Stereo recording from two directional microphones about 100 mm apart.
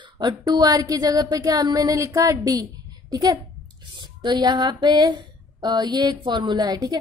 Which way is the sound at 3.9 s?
50° right (ahead or behind).